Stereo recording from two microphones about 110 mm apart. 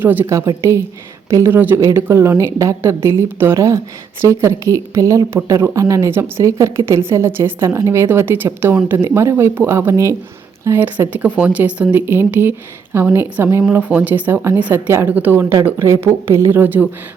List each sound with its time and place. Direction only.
0.0 s speech: 15° right (ahead or behind)